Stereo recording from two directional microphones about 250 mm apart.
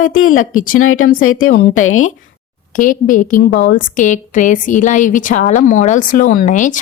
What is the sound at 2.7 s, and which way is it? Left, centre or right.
A woman's voice, left.